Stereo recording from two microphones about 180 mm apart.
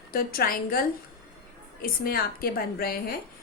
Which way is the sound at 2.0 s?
55° left (ahead or behind).